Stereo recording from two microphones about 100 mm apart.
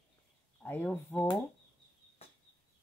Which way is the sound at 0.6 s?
20° left (ahead or behind).